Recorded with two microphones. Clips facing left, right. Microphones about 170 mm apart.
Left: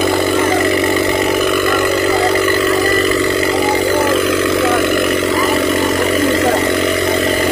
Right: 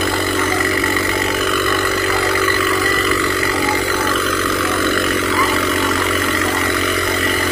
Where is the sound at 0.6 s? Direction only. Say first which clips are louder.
Left 5 dB; 20° left (ahead or behind).